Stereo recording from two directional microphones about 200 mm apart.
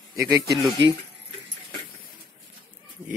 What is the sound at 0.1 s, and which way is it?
Speech, 20° right (ahead or behind).